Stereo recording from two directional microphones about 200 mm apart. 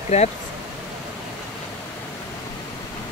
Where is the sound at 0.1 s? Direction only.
35° left (ahead or behind).